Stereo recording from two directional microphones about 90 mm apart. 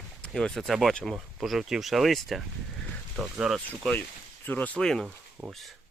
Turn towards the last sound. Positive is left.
turn(degrees=-10)  # may be behind; listen again after turning